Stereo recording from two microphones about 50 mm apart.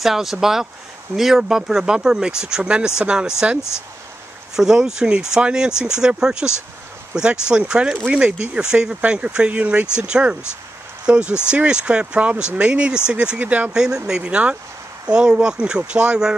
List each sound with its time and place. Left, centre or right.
0.0 s speech: centre
4.6 s speech: centre; by 13.7 s right
13.7 s speech: centre
14.2 s speech: right